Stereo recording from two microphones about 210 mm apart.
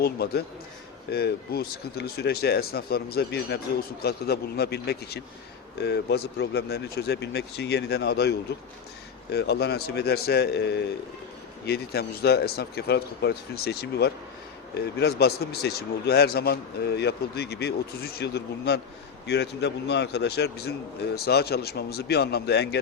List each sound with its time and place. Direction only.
0.0 s speech: 50° left (ahead or behind)